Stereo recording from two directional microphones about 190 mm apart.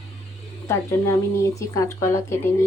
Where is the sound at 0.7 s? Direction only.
15° left (ahead or behind).